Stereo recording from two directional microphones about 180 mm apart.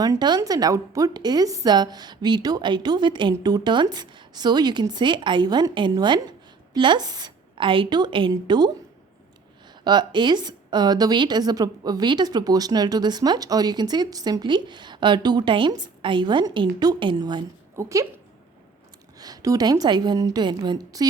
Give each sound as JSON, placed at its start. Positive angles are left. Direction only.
{"t": 0.0, "sound": "a woman's voice", "side_deg": -20}
{"t": 9.8, "sound": "a woman's voice", "side_deg": -25}
{"t": 19.2, "sound": "a woman's voice", "side_deg": -20}